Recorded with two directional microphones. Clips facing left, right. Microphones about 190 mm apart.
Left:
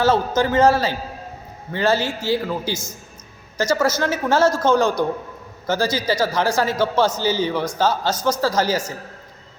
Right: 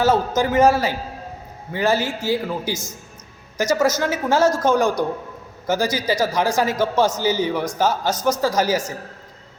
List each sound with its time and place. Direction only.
0.0 s a man's voice: 15° right (ahead or behind)